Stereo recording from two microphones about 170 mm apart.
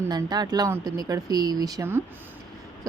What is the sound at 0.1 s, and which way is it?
Speech, 25° right (ahead or behind).